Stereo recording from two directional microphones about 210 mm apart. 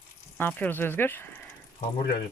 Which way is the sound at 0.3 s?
10° left (ahead or behind).